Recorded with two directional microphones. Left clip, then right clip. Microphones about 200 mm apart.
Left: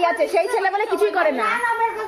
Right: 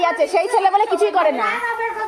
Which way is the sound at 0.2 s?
10° right (ahead or behind).